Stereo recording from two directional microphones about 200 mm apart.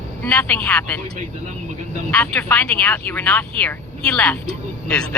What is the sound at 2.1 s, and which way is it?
Speech, 5° left (ahead or behind).